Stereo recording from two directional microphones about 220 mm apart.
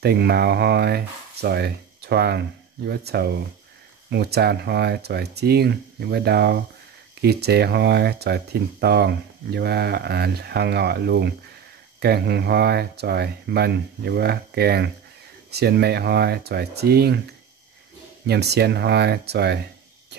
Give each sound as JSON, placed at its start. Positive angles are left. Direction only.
{"t": 0.0, "sound": "speech", "side_deg": -45}
{"t": 18.2, "sound": "speech", "side_deg": -50}